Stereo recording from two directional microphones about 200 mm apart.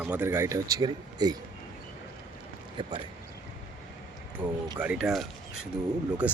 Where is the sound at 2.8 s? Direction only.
25° right (ahead or behind).